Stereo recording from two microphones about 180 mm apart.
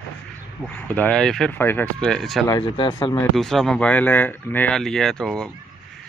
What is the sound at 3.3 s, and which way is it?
Speech, centre (ahead or behind).